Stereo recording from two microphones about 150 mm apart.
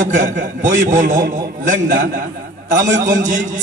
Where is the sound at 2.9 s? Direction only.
55° right (ahead or behind).